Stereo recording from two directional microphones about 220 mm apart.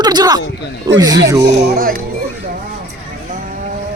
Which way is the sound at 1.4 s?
40° right (ahead or behind).